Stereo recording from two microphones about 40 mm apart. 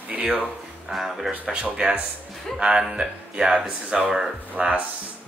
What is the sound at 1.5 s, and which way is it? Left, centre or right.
Music, right.